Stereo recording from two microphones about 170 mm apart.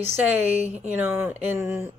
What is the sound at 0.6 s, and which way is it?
Speech, 40° right (ahead or behind).